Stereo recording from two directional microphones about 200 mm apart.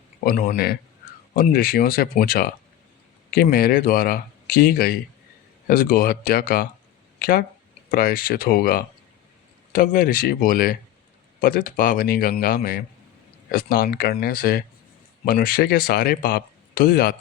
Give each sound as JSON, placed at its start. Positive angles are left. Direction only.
{"t": 0.3, "sound": "speech", "side_deg": 45}